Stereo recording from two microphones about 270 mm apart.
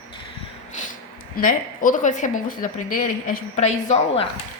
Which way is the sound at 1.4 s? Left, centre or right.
Left.